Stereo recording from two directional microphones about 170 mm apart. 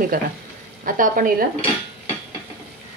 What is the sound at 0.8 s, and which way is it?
Speech, 55° right (ahead or behind).